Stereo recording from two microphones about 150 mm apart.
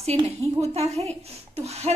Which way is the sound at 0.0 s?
45° right (ahead or behind).